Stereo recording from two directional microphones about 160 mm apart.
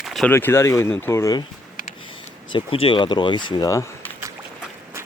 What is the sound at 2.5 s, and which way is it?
Speech, 35° left (ahead or behind).